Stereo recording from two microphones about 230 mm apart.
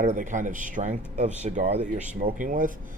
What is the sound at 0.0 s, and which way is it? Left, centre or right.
Speech, right.